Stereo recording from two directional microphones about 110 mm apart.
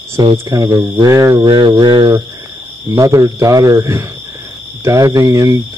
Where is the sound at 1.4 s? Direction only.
45° right (ahead or behind).